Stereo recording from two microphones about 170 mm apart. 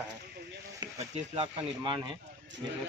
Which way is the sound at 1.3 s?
30° right (ahead or behind).